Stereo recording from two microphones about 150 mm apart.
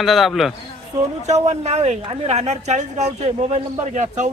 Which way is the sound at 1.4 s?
45° right (ahead or behind).